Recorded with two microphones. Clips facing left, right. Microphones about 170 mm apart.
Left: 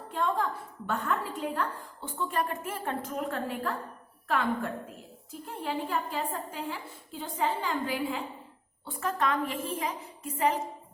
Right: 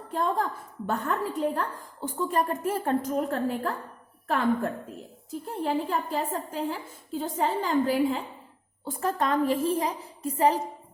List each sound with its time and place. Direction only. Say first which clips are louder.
0.1 s a woman's voice: right 2 dB; 40° right (ahead or behind)
5.3 s a woman's voice: right 6 dB; 40° right (ahead or behind)